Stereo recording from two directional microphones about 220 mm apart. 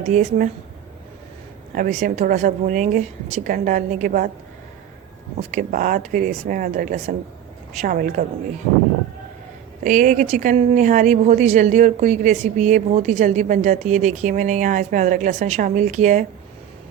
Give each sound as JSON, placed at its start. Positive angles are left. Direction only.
{"t": 0.0, "sound": "speech", "side_deg": -35}
{"t": 1.7, "sound": "speech", "side_deg": -35}
{"t": 5.4, "sound": "speech", "side_deg": -35}
{"t": 9.8, "sound": "speech", "side_deg": -35}